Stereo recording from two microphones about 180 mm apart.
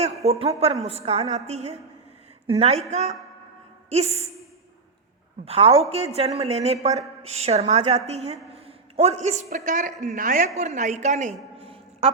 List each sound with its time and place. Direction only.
0.0 s a woman's voice: 35° right (ahead or behind)
5.5 s a woman's voice: 35° right (ahead or behind)
8.5 s a sound: 35° right (ahead or behind)
9.6 s a woman's voice: 45° right (ahead or behind)